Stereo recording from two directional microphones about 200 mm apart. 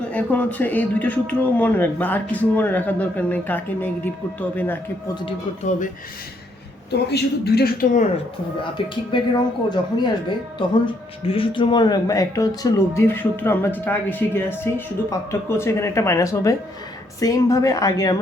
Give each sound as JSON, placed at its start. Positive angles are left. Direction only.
{"t": 0.1, "sound": "speech", "side_deg": 5}
{"t": 5.2, "sound": "speech", "side_deg": 35}
{"t": 6.9, "sound": "a woman's voice", "side_deg": 55}
{"t": 8.8, "sound": "speech", "side_deg": 25}